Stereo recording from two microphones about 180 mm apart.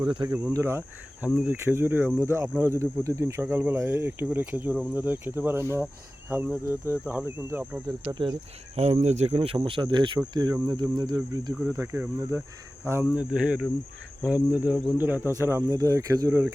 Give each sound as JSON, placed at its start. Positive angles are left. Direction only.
{"t": 0.1, "sound": "speech", "side_deg": -25}
{"t": 8.2, "sound": "speech", "side_deg": -30}